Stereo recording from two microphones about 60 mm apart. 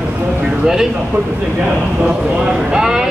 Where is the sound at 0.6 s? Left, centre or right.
Centre.